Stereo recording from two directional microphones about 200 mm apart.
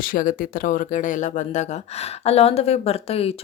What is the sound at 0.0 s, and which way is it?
Speech, 45° left (ahead or behind).